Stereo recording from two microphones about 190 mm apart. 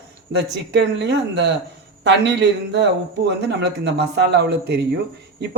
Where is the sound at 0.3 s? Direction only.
65° right (ahead or behind).